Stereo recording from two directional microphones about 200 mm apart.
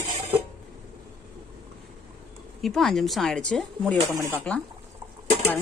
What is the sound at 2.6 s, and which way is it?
Speech, centre (ahead or behind).